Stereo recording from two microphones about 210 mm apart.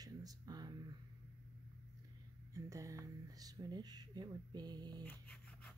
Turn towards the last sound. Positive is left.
turn(degrees=5)  # may be behind; listen again after turning